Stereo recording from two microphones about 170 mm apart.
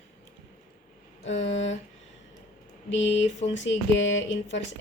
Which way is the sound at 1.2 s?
40° left (ahead or behind).